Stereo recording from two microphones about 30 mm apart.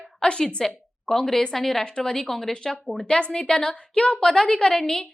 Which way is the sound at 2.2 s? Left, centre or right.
Centre.